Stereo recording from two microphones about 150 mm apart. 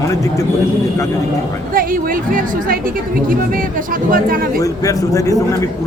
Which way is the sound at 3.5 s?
65° right (ahead or behind).